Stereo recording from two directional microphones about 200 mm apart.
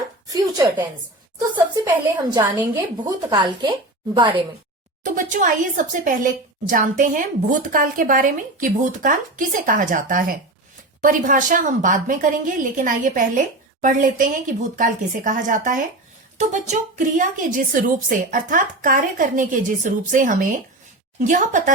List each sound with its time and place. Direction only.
0.3 s a woman's voice: 20° right (ahead or behind)
5.0 s a woman's voice: 40° right (ahead or behind)